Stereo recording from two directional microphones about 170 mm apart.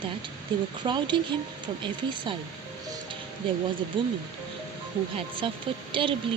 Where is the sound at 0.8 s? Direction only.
25° right (ahead or behind).